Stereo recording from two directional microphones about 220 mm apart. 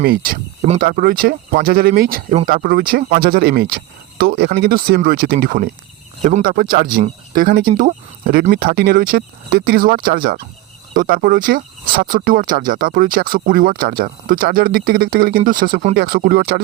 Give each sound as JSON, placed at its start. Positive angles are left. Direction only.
{"t": 0.0, "sound": "speech", "side_deg": -40}